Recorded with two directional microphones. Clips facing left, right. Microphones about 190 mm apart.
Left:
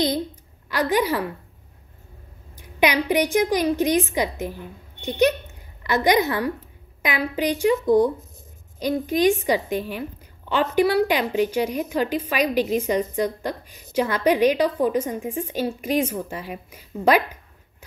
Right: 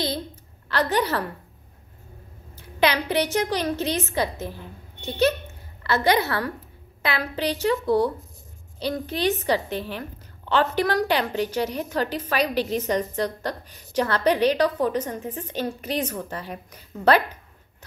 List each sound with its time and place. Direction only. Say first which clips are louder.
0.7 s a woman's voice: left 2 dB; 10° left (ahead or behind)
2.5 s a woman's voice: left 2 dB; 15° left (ahead or behind)